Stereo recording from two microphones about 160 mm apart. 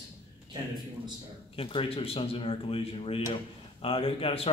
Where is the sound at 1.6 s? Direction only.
35° left (ahead or behind).